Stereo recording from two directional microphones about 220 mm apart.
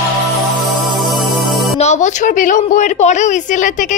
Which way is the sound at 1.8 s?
30° left (ahead or behind).